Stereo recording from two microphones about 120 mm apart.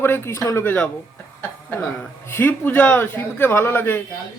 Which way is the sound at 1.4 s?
15° left (ahead or behind).